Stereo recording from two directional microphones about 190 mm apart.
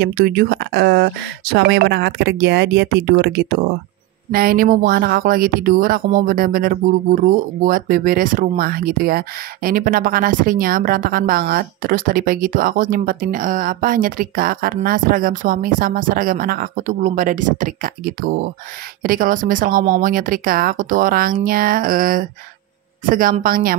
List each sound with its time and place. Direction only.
0.0 s speech: 55° right (ahead or behind)